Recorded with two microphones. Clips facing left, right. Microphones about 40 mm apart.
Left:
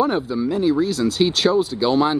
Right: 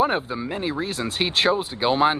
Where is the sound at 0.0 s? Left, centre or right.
Right.